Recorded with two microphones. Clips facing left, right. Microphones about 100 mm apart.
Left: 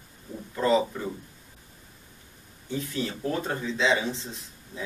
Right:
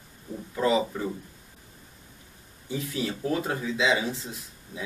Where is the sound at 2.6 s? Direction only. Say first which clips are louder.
Even; 10° right (ahead or behind).